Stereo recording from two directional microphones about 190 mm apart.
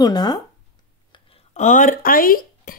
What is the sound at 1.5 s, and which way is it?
Speech, 40° left (ahead or behind).